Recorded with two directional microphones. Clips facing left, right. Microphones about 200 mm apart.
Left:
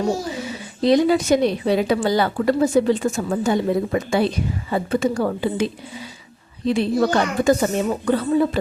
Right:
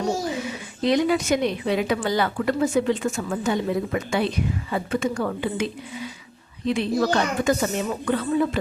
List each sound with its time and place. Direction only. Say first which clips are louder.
0.3 s a woman's voice: left 2 dB; 35° left (ahead or behind)